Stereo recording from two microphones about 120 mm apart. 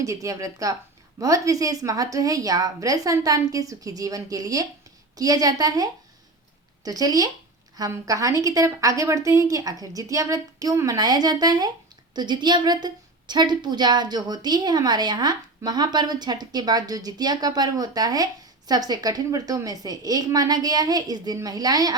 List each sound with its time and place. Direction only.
0.0 s a woman's voice: 25° right (ahead or behind)